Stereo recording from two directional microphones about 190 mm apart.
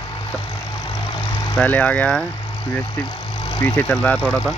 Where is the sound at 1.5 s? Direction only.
5° left (ahead or behind).